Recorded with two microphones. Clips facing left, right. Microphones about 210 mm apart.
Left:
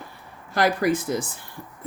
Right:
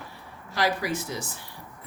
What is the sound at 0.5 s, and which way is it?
Speech, 50° left (ahead or behind).